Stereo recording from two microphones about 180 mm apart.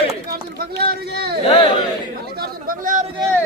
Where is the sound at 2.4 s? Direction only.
50° right (ahead or behind).